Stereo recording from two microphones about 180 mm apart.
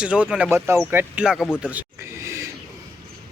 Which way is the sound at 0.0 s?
5° right (ahead or behind).